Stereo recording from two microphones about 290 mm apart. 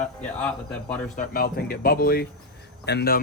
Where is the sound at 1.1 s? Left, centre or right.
Left.